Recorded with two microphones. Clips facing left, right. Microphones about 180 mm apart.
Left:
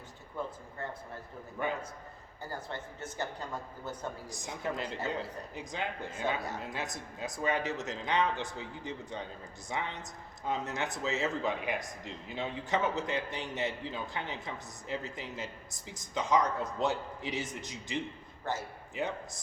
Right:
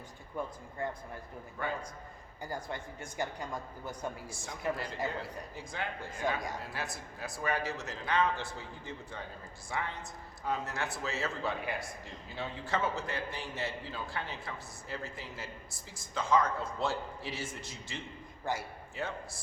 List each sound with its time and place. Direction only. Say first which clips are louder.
0.4 s speech: right 1 dB; 15° right (ahead or behind)
1.6 s a man's voice: left 3 dB; 20° left (ahead or behind)
2.4 s speech: right 1 dB; 15° right (ahead or behind)
4.3 s a man's voice: right 1 dB; 20° left (ahead or behind)
18.5 s speech: even; 10° right (ahead or behind)
18.9 s speech: left 3 dB; 20° left (ahead or behind)